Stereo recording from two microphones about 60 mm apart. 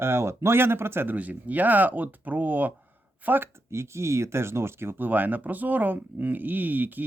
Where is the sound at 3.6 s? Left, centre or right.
Right.